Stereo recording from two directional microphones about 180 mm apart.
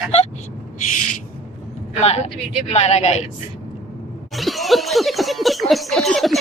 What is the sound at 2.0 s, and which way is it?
Speech, 35° left (ahead or behind).